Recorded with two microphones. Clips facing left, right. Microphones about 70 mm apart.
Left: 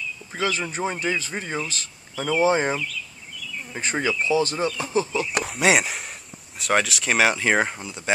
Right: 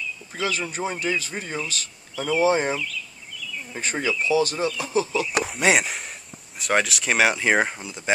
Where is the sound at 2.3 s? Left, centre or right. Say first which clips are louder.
Even; left.